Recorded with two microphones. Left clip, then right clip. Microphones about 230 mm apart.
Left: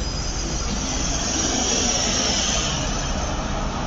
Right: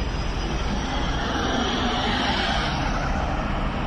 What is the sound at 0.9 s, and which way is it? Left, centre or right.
Vehicle, left.